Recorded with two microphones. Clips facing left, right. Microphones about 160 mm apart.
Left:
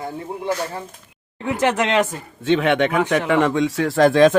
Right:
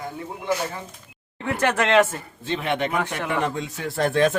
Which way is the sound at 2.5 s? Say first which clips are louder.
Left 8 dB; 80° left.